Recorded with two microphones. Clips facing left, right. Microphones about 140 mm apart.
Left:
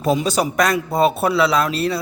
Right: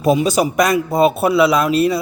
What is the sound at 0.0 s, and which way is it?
Speech, 10° right (ahead or behind).